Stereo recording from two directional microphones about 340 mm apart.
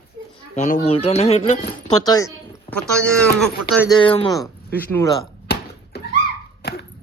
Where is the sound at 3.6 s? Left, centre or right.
Right.